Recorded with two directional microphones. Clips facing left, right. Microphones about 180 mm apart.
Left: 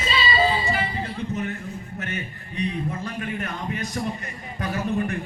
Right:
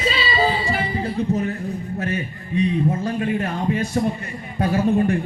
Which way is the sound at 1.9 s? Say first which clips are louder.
Right 7 dB; 30° right (ahead or behind).